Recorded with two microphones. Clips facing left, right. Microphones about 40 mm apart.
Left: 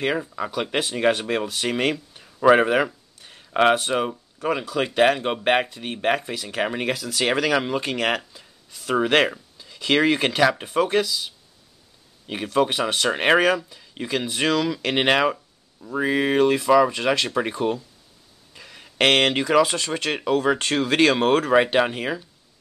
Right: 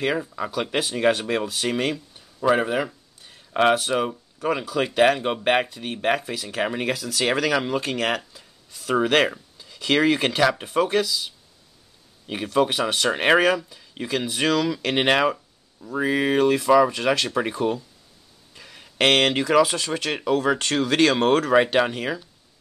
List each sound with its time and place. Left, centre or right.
0.0 s speech: centre
2.1 s a sound: left
3.5 s speech: centre